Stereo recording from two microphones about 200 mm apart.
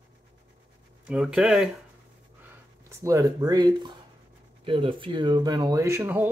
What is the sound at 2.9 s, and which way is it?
Speech, 15° right (ahead or behind).